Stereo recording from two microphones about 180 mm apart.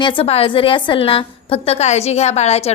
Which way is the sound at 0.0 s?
30° left (ahead or behind).